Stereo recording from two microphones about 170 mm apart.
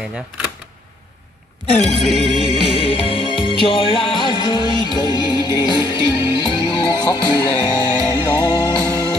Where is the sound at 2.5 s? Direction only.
35° left (ahead or behind).